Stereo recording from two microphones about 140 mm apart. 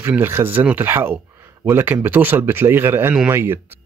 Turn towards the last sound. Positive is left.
turn(degrees=-15)  # may be behind; listen again after turning